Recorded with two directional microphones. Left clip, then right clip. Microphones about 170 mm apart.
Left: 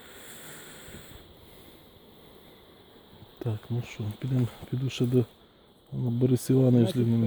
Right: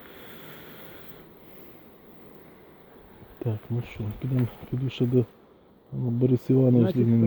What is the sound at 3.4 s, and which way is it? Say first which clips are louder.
Speech: right 3 dB; 25° left (ahead or behind).